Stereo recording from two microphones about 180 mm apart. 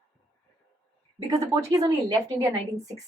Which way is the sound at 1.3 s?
20° right (ahead or behind).